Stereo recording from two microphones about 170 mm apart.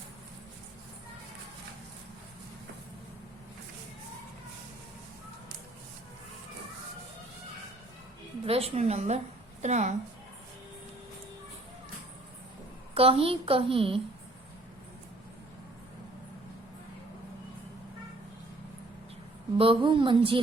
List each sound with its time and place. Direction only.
8.4 s a woman's voice: 35° right (ahead or behind)
12.9 s a woman's voice: 35° right (ahead or behind)
19.5 s a woman's voice: 30° right (ahead or behind)